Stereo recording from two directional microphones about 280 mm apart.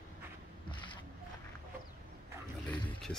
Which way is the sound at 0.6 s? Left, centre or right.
Centre.